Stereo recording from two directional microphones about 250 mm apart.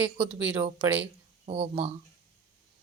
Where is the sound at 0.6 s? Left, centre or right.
Right.